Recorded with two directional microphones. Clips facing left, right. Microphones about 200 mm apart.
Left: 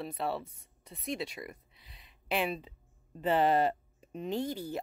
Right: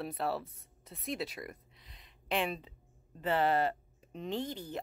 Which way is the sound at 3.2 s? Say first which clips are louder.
Left 3 dB; 15° left (ahead or behind).